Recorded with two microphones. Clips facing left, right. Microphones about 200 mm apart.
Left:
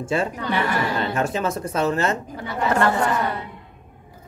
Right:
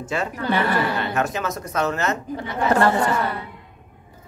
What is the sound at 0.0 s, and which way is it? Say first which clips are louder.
Speech: left 2 dB; 30° left (ahead or behind).